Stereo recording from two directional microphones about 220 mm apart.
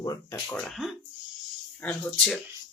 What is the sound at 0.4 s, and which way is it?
Speech, 5° left (ahead or behind).